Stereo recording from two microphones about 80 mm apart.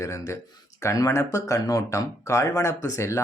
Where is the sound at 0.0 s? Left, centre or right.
Left.